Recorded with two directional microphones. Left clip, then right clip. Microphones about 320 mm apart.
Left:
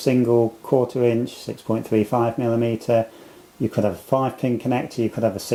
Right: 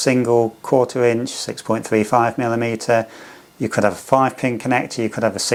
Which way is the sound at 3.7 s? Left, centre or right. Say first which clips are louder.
Right 6 dB; right.